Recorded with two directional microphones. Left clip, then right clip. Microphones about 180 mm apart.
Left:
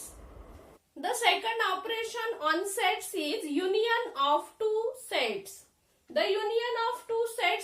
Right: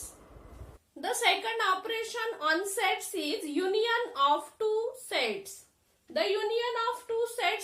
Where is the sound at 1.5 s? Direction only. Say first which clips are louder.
Right 1 dB; 25° right (ahead or behind).